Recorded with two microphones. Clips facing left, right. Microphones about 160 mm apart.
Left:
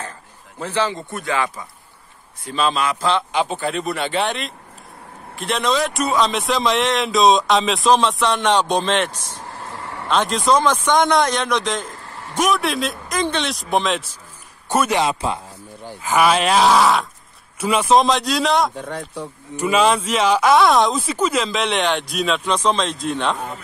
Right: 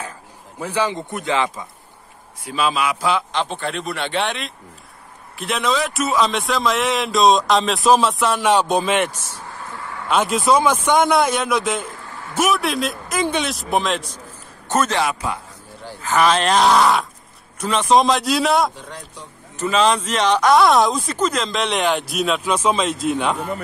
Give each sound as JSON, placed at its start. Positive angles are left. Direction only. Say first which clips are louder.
{"t": 0.6, "sound": "a man's voice", "louder": "even", "side_deg": -10}
{"t": 2.4, "sound": "a man's voice", "louder": "even", "side_deg": -5}
{"t": 3.3, "sound": "a man's voice", "louder": "left 3 dB", "side_deg": 5}
{"t": 14.7, "sound": "speech", "louder": "left 1 dB", "side_deg": 10}
{"t": 18.8, "sound": "speech", "louder": "left 8 dB", "side_deg": 60}
{"t": 19.5, "sound": "speech", "louder": "left 1 dB", "side_deg": 10}